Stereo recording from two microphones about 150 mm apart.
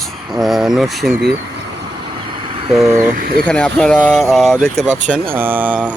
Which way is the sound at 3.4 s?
5° left (ahead or behind).